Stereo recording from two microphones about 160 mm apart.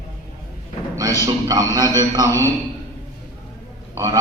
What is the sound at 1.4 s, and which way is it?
Speech, 20° right (ahead or behind).